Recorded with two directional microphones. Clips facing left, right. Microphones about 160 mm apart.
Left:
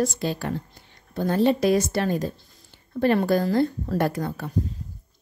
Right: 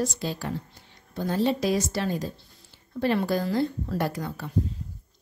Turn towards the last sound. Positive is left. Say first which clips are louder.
# left 4 dB
turn(degrees=50)  # may be behind; listen again after turning